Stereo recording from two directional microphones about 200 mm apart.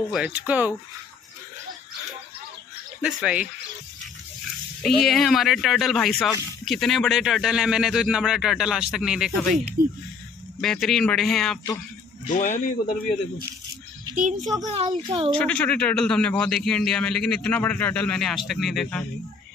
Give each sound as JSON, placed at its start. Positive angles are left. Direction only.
{"t": 0.1, "sound": "speech", "side_deg": -5}
{"t": 3.0, "sound": "speech", "side_deg": -5}
{"t": 4.8, "sound": "speech", "side_deg": 0}
{"t": 9.8, "sound": "speech", "side_deg": -45}
{"t": 10.6, "sound": "speech", "side_deg": 0}
{"t": 12.3, "sound": "speech", "side_deg": 40}
{"t": 14.1, "sound": "a child's voice", "side_deg": -40}
{"t": 14.7, "sound": "a child's voice", "side_deg": -25}
{"t": 15.3, "sound": "speech", "side_deg": 5}